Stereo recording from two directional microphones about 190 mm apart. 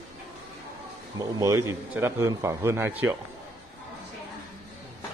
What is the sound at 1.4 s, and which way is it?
Speech, 15° right (ahead or behind).